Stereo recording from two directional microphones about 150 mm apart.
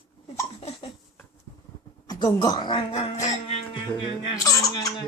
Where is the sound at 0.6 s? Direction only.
40° left (ahead or behind).